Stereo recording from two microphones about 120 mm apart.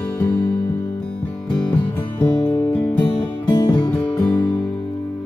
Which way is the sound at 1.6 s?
10° left (ahead or behind).